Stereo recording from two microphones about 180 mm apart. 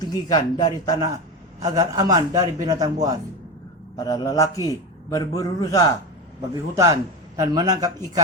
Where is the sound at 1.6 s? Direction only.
20° right (ahead or behind).